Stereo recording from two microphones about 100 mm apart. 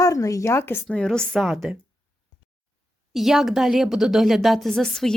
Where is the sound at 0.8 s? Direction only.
10° left (ahead or behind).